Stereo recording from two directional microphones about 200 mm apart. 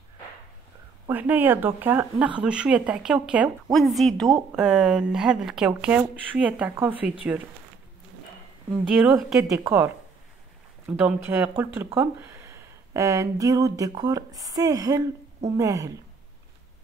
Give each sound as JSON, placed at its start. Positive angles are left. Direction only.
{"t": 1.0, "sound": "speech", "side_deg": -10}
{"t": 8.9, "sound": "speech", "side_deg": -5}
{"t": 11.0, "sound": "speech", "side_deg": -10}